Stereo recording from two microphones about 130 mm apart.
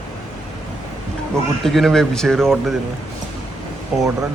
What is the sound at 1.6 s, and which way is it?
Speech, 5° left (ahead or behind).